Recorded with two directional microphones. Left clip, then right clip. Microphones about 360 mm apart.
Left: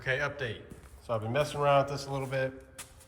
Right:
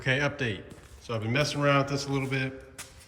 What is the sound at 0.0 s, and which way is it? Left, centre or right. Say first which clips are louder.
Speech: right 4 dB; centre.